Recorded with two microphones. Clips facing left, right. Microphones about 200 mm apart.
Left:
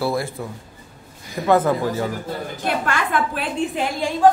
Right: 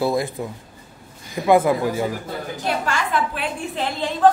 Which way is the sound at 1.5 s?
10° right (ahead or behind).